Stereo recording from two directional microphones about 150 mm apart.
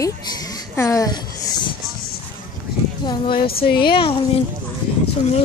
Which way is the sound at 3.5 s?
90° left.